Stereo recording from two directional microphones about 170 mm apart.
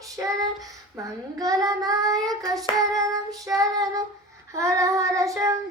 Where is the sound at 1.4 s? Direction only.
20° right (ahead or behind).